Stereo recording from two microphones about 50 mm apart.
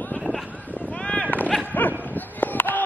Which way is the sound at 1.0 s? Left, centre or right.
Left.